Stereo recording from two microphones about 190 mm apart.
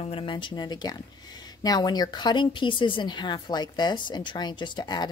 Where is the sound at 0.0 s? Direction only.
30° left (ahead or behind).